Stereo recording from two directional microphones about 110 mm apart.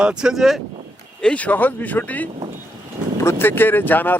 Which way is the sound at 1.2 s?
10° left (ahead or behind).